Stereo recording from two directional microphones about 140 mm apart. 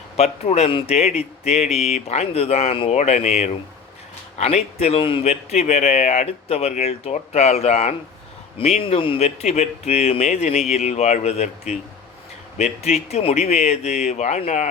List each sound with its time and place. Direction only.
0.2 s a man's voice: 50° left (ahead or behind)